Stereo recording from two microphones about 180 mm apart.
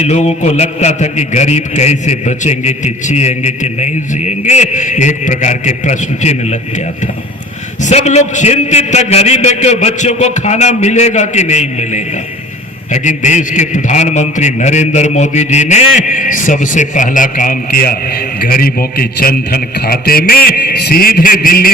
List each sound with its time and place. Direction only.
0.0 s a man's voice: 35° left (ahead or behind); by 21.7 s 55° left (ahead or behind)